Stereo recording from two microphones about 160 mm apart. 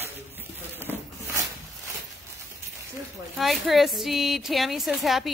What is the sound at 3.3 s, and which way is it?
A woman's voice, centre (ahead or behind).